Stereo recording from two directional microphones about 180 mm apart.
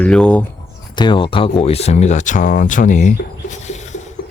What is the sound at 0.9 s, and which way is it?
Speech, 25° left (ahead or behind).